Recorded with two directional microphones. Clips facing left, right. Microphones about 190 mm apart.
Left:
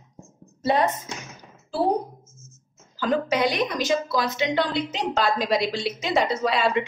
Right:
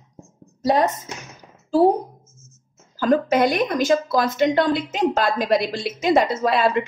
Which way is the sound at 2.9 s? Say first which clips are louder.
Right 5 dB; 45° right (ahead or behind).